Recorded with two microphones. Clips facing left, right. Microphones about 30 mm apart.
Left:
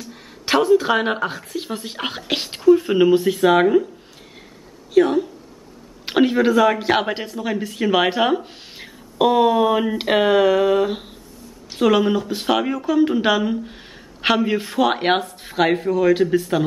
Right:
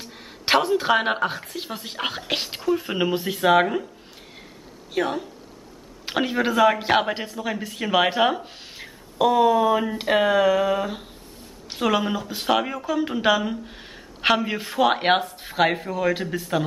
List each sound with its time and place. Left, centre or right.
0.1 s speech: centre
4.9 s speech: centre
8.8 s speech: centre
11.7 s speech: centre